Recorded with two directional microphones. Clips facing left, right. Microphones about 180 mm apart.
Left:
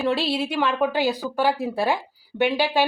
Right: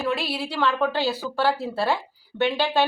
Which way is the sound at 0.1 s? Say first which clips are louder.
Left 4 dB; 30° left (ahead or behind).